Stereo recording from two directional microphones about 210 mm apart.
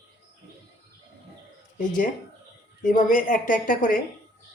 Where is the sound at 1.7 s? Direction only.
40° left (ahead or behind).